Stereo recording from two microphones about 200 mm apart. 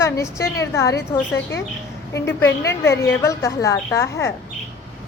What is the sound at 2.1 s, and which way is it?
A woman's voice, 10° left (ahead or behind).